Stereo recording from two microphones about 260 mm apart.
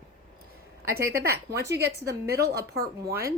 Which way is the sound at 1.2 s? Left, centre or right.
Right.